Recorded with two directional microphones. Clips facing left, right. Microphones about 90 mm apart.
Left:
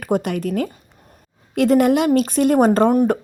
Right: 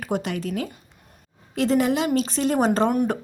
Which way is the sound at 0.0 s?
50° left (ahead or behind).